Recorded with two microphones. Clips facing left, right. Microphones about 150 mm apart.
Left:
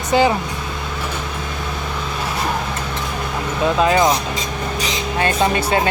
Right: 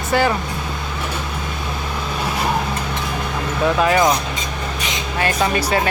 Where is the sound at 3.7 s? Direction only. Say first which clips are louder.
Left 1 dB; 25° left (ahead or behind).